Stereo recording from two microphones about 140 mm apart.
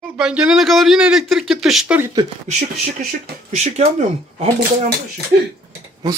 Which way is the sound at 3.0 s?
90° right.